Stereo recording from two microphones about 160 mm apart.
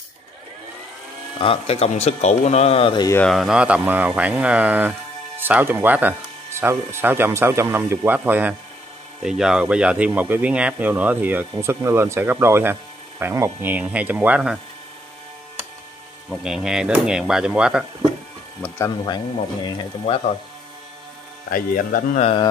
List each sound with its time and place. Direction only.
1.4 s speech: 35° left (ahead or behind)
3.3 s speech: centre (ahead or behind)
16.3 s speech: 5° right (ahead or behind)
18.6 s speech: 10° left (ahead or behind)
19.0 s speech: 25° left (ahead or behind)
21.5 s speech: 60° left (ahead or behind)